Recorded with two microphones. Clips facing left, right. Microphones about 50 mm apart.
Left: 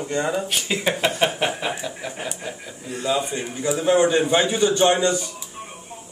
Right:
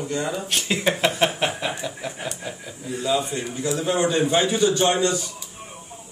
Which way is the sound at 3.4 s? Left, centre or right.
Centre.